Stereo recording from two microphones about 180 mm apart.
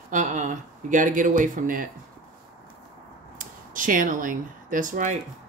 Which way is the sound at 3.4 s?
45° right (ahead or behind).